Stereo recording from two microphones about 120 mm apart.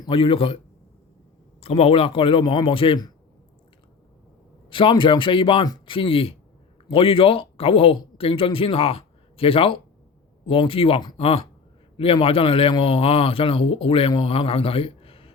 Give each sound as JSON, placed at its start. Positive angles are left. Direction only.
{"t": 0.1, "sound": "a man's voice", "side_deg": 50}
{"t": 1.6, "sound": "a man's voice", "side_deg": 55}
{"t": 4.7, "sound": "a man's voice", "side_deg": 45}